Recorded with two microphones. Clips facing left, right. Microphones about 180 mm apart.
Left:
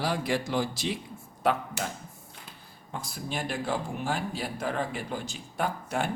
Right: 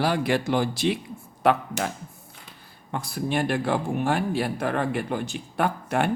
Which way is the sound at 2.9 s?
65° right (ahead or behind).